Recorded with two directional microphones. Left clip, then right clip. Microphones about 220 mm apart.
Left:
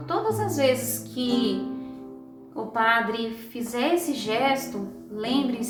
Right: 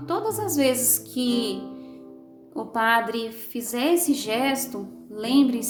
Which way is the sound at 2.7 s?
55° right (ahead or behind).